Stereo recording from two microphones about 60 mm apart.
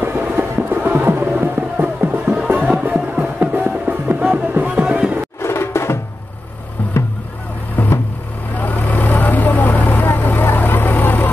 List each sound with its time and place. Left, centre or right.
0.0 s music: right
5.4 s music: left
6.8 s music: left
7.7 s vehicle: left